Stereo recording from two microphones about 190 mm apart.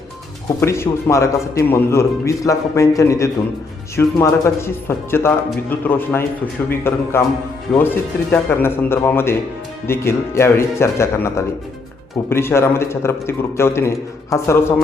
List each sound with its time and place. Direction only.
0.6 s a man's voice: 15° left (ahead or behind)